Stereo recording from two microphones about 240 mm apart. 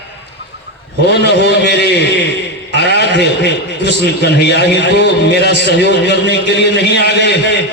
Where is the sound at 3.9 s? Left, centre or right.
Left.